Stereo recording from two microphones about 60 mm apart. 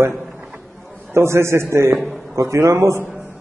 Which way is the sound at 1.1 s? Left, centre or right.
Right.